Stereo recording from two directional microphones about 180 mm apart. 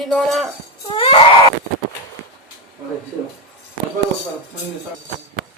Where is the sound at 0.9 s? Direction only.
30° left (ahead or behind).